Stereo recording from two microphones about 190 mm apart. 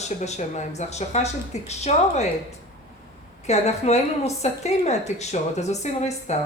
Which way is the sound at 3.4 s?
35° left (ahead or behind).